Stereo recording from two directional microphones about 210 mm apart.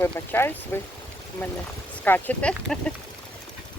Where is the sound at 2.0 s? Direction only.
10° left (ahead or behind).